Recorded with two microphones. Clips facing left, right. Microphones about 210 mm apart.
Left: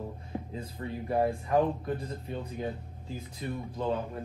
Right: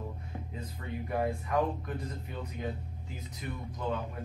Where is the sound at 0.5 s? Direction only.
30° left (ahead or behind).